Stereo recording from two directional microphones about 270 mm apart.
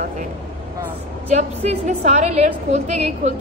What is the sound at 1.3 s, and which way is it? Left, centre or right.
A woman's voice, right.